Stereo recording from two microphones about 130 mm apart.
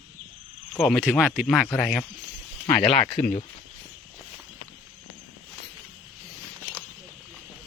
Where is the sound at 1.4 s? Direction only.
5° left (ahead or behind).